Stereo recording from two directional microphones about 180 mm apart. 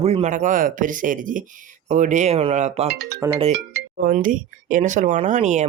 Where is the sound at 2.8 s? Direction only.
65° right (ahead or behind).